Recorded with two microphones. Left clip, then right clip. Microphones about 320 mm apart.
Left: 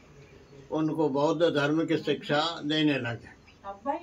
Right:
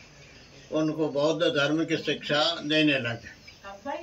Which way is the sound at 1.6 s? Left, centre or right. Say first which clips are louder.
Right 1 dB; centre.